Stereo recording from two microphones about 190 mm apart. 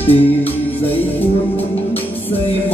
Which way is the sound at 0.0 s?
30° left (ahead or behind).